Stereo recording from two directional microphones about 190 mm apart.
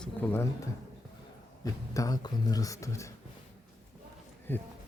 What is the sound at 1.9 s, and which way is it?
Speech, 20° left (ahead or behind).